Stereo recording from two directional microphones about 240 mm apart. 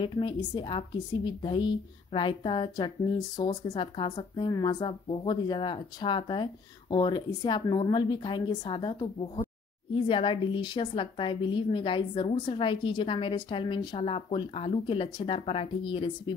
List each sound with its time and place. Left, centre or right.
0.0 s a woman's voice: centre